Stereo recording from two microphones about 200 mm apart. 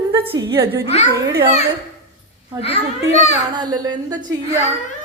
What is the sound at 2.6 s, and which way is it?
Speech, 35° left (ahead or behind).